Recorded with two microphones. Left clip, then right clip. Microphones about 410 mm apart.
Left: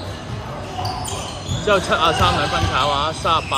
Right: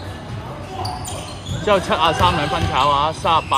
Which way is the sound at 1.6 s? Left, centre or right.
Centre.